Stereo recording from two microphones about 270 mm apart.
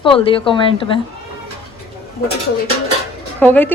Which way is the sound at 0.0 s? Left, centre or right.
Centre.